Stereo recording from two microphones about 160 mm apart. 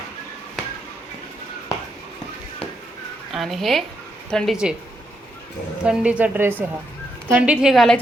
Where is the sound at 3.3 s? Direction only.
Centre (ahead or behind).